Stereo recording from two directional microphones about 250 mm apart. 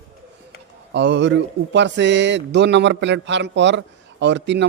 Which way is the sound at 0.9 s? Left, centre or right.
Right.